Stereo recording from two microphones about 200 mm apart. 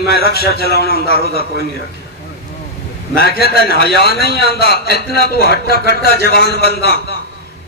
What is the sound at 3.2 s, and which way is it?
A man's voice, 55° left (ahead or behind).